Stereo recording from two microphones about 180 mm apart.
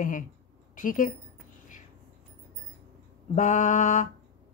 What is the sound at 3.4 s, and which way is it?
Speech, 45° left (ahead or behind).